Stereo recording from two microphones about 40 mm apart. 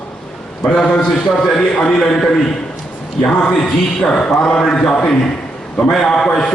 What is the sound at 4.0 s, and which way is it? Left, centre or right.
A man's voice, centre.